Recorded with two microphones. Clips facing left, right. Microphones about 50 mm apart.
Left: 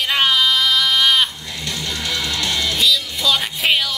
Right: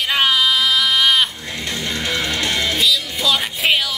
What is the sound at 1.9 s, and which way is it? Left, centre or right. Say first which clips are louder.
Music: right 3 dB; right.